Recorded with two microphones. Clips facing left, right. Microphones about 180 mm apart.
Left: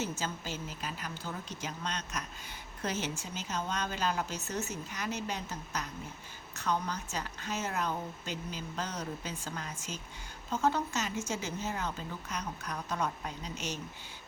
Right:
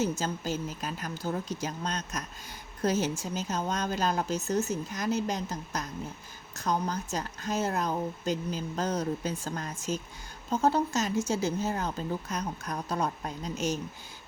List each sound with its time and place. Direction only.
0.0 s speech: 40° right (ahead or behind)